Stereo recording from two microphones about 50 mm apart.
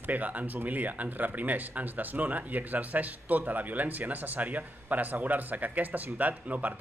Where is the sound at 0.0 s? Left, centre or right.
Right.